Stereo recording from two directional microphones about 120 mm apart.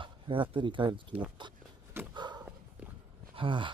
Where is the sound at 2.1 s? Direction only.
35° right (ahead or behind).